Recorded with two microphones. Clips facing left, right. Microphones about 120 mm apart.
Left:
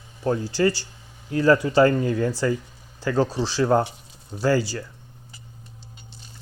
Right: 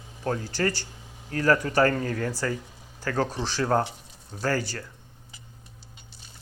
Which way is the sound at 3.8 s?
Centre (ahead or behind).